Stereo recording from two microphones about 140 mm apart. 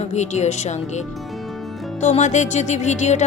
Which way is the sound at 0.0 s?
55° left (ahead or behind).